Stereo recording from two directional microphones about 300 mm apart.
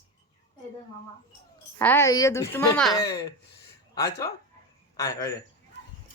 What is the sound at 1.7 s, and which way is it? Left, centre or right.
A woman's voice, centre.